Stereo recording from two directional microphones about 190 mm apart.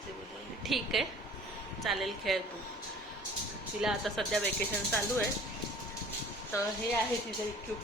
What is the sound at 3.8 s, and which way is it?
Speech, centre (ahead or behind).